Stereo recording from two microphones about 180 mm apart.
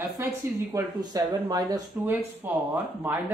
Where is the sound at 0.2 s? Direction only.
15° right (ahead or behind).